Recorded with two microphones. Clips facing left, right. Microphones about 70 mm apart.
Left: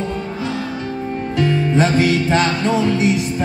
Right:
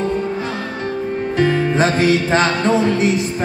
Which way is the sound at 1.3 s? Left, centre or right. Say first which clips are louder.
Right 1 dB; right.